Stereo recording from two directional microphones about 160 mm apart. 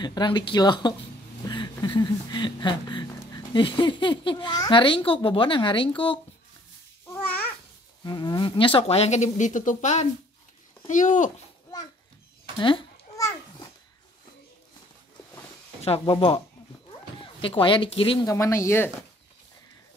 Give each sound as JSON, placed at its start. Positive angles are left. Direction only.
{"t": 0.0, "sound": "speech", "side_deg": 25}
{"t": 1.4, "sound": "a sound", "side_deg": 25}
{"t": 3.5, "sound": "a child's voice", "side_deg": 30}
{"t": 7.1, "sound": "babbling", "side_deg": 10}
{"t": 8.0, "sound": "a child's voice", "side_deg": 25}
{"t": 12.5, "sound": "speech", "side_deg": 30}
{"t": 15.8, "sound": "a child's voice", "side_deg": 40}
{"t": 18.2, "sound": "speech", "side_deg": 20}